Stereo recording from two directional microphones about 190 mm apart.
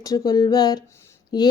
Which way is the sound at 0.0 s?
20° left (ahead or behind).